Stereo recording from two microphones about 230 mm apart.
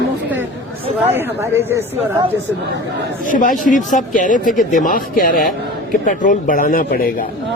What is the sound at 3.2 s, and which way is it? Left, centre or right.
A man's voice, left.